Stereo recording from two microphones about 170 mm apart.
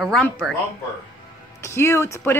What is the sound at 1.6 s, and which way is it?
Speech, 15° left (ahead or behind).